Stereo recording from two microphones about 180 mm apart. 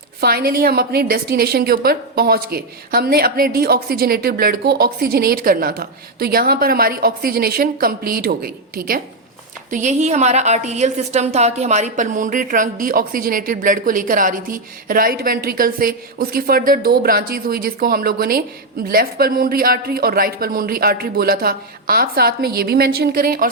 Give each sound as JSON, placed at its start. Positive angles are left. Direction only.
{"t": 0.2, "sound": "a woman's voice", "side_deg": -60}
{"t": 9.6, "sound": "a woman's voice", "side_deg": -45}